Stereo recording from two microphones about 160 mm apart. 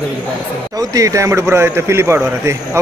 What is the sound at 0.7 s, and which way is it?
Speech, 20° right (ahead or behind).